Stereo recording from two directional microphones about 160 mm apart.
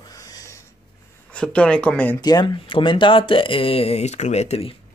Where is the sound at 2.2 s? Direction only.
25° left (ahead or behind).